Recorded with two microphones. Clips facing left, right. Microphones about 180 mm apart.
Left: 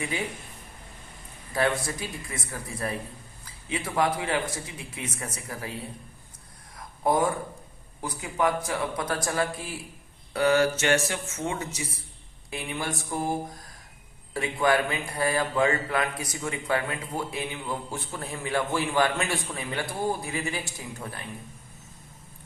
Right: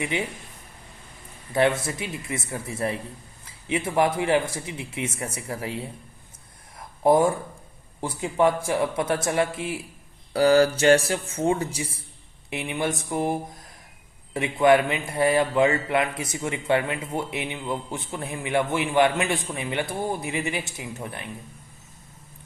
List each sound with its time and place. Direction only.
0.1 s a man's voice: 25° right (ahead or behind)
1.5 s a man's voice: 25° right (ahead or behind)
6.7 s a sound: 25° right (ahead or behind)
8.0 s a man's voice: 25° right (ahead or behind)